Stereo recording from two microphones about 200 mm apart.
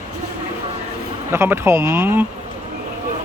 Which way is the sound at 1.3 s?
15° right (ahead or behind).